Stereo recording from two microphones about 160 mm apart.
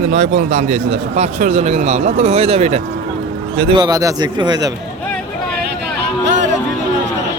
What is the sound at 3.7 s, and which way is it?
Speech, 25° right (ahead or behind).